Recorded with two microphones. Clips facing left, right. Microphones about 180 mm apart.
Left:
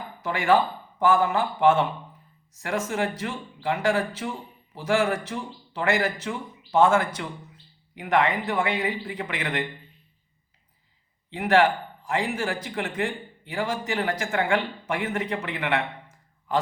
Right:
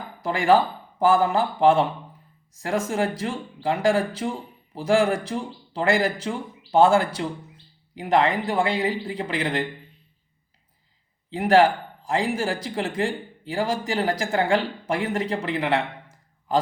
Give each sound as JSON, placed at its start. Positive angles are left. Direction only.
{"t": 0.2, "sound": "speech", "side_deg": -30}
{"t": 11.3, "sound": "a man's voice", "side_deg": -35}